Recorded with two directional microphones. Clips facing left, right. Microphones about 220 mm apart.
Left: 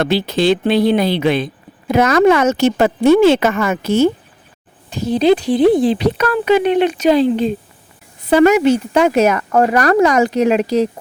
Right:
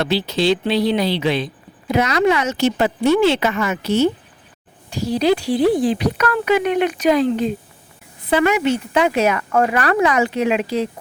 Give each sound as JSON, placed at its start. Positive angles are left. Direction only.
{"t": 0.0, "sound": "speech", "side_deg": 50}
{"t": 4.9, "sound": "speech", "side_deg": 20}
{"t": 8.3, "sound": "a woman's voice", "side_deg": 40}